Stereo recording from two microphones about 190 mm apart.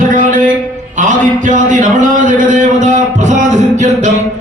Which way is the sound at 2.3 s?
40° right (ahead or behind).